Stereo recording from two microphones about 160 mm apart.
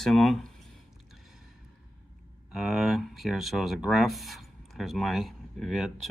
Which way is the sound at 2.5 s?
Centre (ahead or behind).